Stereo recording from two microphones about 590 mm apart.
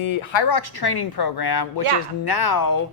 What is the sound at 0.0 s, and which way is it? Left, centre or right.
Speech, left.